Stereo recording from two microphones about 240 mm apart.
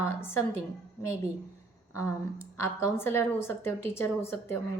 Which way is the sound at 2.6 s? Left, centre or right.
Centre.